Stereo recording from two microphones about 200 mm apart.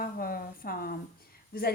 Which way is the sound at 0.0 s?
45° left (ahead or behind).